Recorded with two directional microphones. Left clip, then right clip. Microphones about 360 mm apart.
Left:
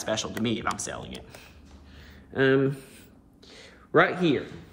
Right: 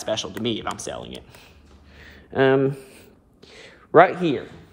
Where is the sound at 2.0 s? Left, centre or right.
Right.